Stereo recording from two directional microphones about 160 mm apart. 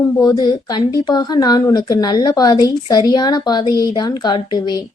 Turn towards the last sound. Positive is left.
turn(degrees=25)  # may be behind; listen again after turning